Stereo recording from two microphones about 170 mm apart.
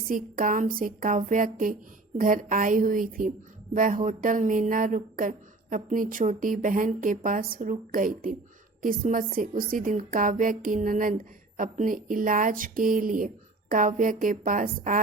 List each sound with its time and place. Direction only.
0.1 s a woman's voice: 55° right (ahead or behind)